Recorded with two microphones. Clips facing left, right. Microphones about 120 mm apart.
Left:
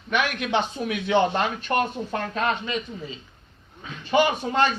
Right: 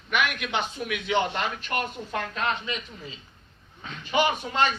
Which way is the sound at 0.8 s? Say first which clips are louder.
Left 4 dB; 35° left (ahead or behind).